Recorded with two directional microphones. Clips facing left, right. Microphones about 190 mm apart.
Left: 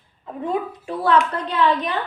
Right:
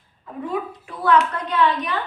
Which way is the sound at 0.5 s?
30° left (ahead or behind).